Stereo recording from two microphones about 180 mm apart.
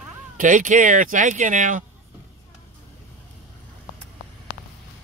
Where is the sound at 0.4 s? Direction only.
45° right (ahead or behind).